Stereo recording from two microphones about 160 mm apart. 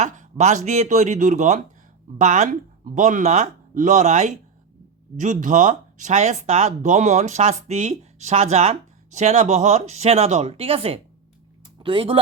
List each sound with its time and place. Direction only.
0.0 s speech: 50° right (ahead or behind)